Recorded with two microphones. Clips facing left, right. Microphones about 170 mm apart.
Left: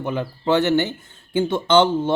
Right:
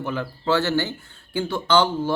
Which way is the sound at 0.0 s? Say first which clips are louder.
Left 3 dB; 20° left (ahead or behind).